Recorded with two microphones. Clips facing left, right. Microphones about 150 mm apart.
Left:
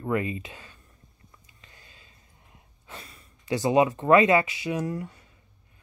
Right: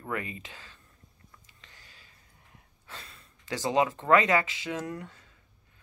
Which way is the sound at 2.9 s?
15° left (ahead or behind).